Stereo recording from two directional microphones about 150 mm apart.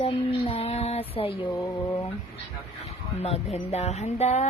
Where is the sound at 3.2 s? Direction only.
45° left (ahead or behind).